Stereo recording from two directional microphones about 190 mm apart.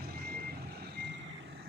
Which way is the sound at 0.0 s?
55° right (ahead or behind).